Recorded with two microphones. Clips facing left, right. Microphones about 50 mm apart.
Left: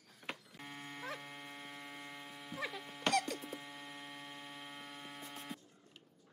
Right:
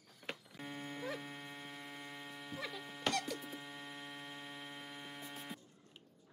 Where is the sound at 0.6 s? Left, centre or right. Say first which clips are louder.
Right 3 dB; centre.